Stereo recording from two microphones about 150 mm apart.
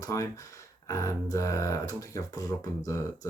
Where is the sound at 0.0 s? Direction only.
20° left (ahead or behind).